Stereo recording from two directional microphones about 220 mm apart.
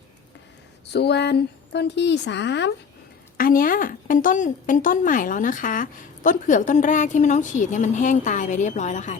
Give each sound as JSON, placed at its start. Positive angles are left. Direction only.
{"t": 0.9, "sound": "a woman's voice", "side_deg": 50}
{"t": 3.3, "sound": "a woman's voice", "side_deg": 40}